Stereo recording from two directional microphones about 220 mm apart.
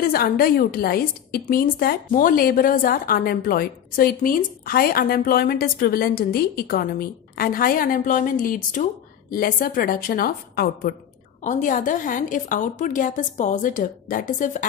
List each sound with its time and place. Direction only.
0.0 s a woman's voice: 40° left (ahead or behind)